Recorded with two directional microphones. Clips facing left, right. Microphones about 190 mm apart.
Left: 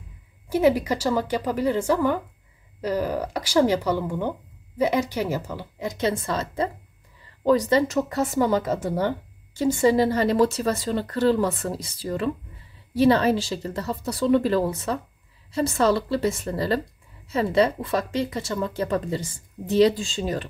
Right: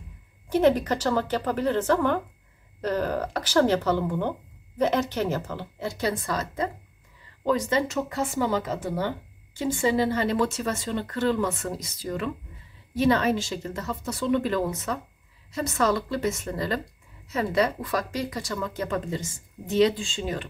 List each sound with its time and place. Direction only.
0.5 s speech: 10° left (ahead or behind); by 20.4 s 40° left (ahead or behind)